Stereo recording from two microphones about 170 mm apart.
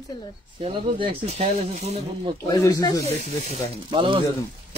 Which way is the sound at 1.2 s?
40° right (ahead or behind).